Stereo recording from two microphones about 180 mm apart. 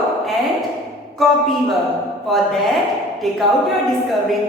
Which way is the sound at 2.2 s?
Centre (ahead or behind).